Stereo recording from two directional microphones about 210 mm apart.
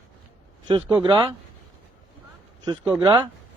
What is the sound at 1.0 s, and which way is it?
Mantra, 20° right (ahead or behind).